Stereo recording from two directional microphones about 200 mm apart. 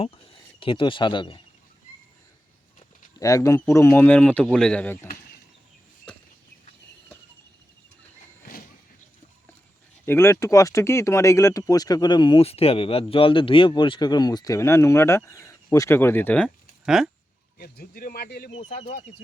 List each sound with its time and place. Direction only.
0.6 s speech: 25° left (ahead or behind)
3.2 s speech: 15° left (ahead or behind)
10.1 s speech: 15° left (ahead or behind)
17.6 s speech: 45° left (ahead or behind)